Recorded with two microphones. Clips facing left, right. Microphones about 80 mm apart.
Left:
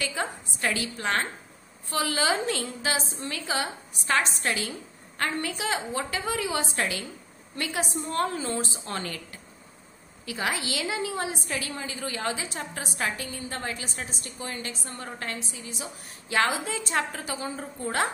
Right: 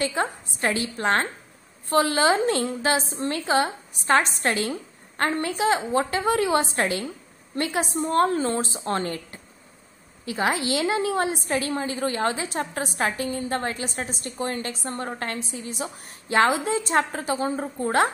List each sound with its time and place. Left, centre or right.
0.0 s a woman's voice: right
0.6 s a woman's voice: right
13.4 s a woman's voice: right
16.4 s a woman's voice: right
16.7 s a woman's voice: right